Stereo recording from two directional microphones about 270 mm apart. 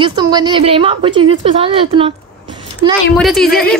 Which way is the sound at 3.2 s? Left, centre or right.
Centre.